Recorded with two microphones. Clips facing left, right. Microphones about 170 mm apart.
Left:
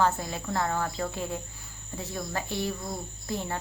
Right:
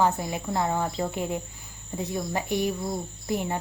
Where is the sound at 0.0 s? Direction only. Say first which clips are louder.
Right 2 dB; 15° right (ahead or behind).